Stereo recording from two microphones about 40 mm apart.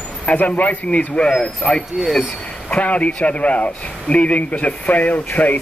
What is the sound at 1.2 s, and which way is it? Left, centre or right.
Speech, left.